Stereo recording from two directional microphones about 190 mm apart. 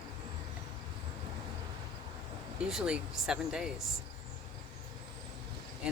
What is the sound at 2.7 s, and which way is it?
Speech, 5° right (ahead or behind).